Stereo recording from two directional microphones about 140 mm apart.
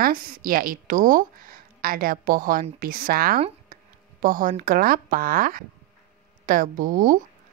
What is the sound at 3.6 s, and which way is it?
Speech, 80° right.